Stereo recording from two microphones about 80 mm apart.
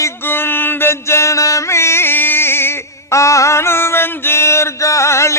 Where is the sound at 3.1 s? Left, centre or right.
Left.